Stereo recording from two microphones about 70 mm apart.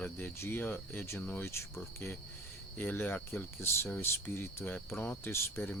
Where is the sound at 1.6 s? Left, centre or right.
Left.